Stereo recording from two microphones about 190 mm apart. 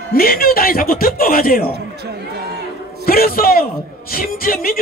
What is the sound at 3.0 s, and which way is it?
A man's voice, 50° left (ahead or behind).